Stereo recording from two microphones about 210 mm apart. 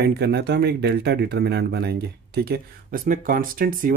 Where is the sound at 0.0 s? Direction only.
50° right (ahead or behind).